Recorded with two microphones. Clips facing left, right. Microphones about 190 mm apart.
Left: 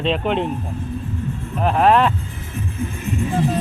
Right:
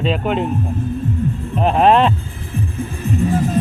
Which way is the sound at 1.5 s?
25° right (ahead or behind).